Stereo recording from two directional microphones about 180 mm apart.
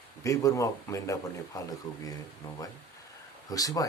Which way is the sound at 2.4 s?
15° left (ahead or behind).